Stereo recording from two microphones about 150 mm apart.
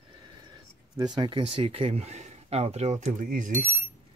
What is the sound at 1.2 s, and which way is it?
Speech, 35° right (ahead or behind).